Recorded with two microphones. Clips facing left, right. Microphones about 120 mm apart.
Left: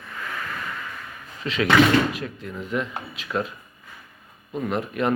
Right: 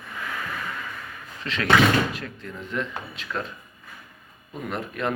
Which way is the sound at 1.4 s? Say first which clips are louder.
Left 2 dB; 5° left (ahead or behind).